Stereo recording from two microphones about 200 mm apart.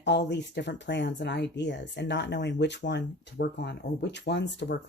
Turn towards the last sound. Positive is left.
turn(degrees=55)  # may be behind; listen again after turning